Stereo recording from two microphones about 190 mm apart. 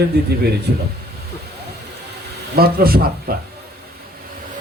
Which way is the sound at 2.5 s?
50° right (ahead or behind).